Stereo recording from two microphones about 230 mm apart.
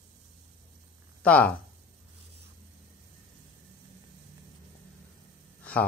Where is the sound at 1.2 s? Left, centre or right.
Centre.